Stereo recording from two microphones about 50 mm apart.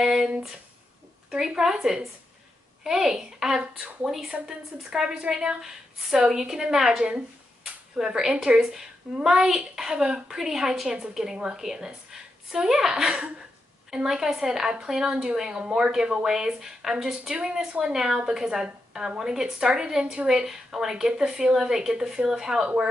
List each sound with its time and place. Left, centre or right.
0.0 s speech: centre
1.5 s speech: centre
5.6 s a woman's voice: centre